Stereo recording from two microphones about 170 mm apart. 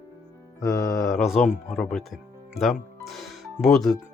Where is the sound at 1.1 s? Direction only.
Centre (ahead or behind).